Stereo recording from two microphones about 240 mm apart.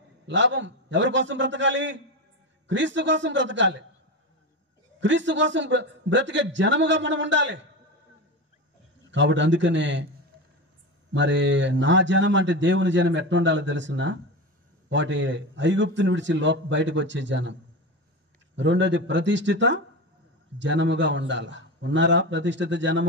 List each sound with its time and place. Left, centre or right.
0.3 s a man's voice: right
5.0 s a man's voice: right
9.1 s a man's voice: right
11.1 s a man's voice: right
18.6 s a man's voice: right